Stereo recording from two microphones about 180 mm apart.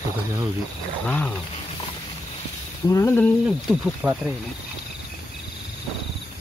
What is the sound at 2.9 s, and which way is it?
Speech, 15° left (ahead or behind).